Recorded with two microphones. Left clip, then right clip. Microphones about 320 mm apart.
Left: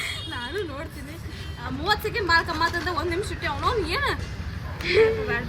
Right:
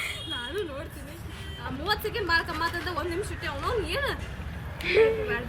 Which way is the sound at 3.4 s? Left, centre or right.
Centre.